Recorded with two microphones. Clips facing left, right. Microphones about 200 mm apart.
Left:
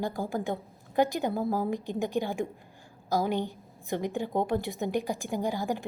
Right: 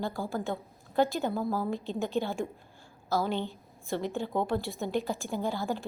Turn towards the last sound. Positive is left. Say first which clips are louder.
# left 2 dB
turn(degrees=15)  # may be behind; listen again after turning